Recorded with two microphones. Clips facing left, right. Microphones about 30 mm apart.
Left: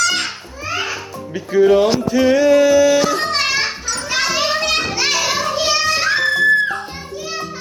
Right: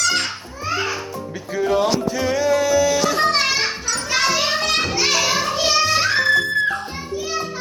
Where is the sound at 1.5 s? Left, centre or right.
Left.